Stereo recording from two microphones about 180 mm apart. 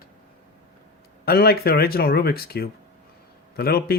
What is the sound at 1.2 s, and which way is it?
Speech, 60° left (ahead or behind).